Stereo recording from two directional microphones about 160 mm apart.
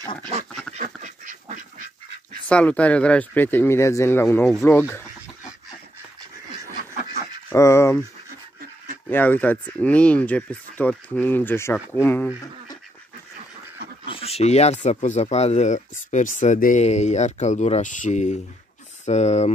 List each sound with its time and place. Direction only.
0.7 s duck: 50° right (ahead or behind)
2.4 s speech: 10° left (ahead or behind)
4.6 s a sound: 15° left (ahead or behind)
7.5 s speech: 20° left (ahead or behind)
9.1 s speech: 10° left (ahead or behind)
14.0 s speech: 35° left (ahead or behind)